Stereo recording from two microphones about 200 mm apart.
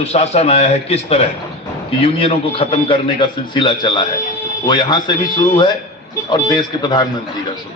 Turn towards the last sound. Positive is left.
turn(degrees=20)  # may be behind; listen again after turning